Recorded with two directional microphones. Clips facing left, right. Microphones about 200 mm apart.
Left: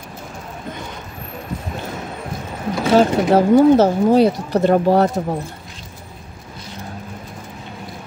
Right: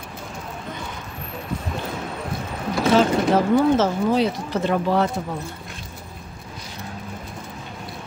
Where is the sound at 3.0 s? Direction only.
40° left (ahead or behind).